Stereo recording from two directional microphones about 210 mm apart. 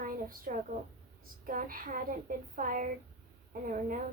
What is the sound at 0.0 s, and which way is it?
A woman's voice, 40° right (ahead or behind).